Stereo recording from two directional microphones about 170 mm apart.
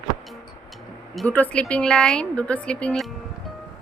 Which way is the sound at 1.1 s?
5° left (ahead or behind).